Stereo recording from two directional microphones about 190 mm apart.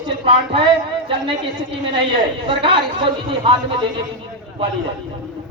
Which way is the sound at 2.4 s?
25° right (ahead or behind).